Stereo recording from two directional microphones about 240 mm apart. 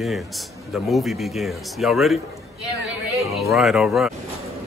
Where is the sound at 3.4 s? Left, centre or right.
Centre.